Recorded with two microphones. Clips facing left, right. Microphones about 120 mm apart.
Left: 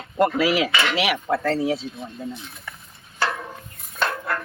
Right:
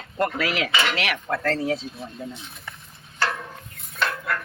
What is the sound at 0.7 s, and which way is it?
Speech, 10° right (ahead or behind).